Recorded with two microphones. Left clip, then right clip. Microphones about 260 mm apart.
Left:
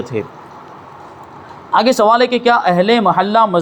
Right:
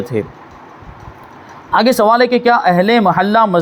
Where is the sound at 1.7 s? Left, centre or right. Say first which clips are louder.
Even; right.